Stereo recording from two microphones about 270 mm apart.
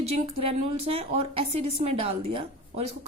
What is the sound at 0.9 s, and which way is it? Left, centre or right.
Speech, right.